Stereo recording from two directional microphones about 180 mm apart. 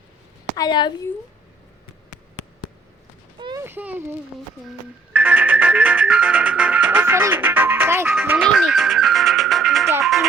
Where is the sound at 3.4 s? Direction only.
25° right (ahead or behind).